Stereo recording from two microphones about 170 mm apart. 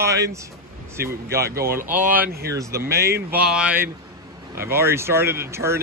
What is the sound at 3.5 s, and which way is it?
Speech, 5° right (ahead or behind).